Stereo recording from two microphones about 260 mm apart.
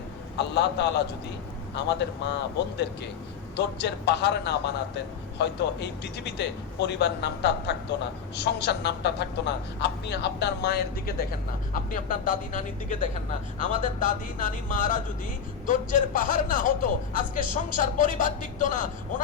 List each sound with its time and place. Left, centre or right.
0.3 s a man's voice: left
3.5 s a man's voice: left